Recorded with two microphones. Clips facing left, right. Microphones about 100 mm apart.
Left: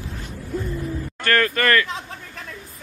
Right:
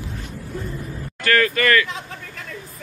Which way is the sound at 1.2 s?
40° left (ahead or behind).